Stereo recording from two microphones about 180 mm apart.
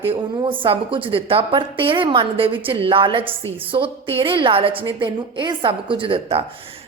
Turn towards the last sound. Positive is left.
turn(degrees=-30)  # may be behind; listen again after turning